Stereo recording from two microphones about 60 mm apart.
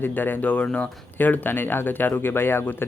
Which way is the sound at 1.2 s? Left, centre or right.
Left.